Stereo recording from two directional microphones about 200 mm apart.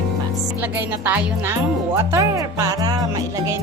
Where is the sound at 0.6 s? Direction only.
10° right (ahead or behind).